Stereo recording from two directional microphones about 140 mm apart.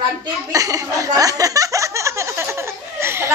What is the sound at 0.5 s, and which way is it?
Chuckle, 25° right (ahead or behind).